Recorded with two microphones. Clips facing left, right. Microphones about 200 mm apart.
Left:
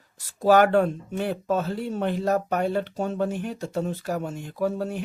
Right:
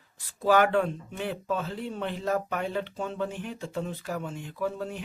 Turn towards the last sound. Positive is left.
turn(degrees=40)  # may be behind; listen again after turning